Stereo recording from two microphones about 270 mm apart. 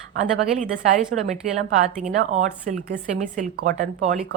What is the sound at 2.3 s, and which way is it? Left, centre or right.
Speech, right.